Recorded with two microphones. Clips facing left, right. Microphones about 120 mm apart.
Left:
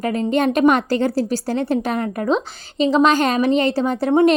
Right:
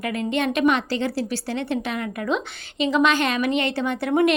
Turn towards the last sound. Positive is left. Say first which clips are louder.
# left 5 dB
turn(degrees=35)  # may be behind; listen again after turning